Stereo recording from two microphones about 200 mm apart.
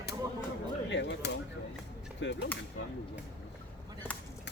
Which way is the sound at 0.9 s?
65° left (ahead or behind).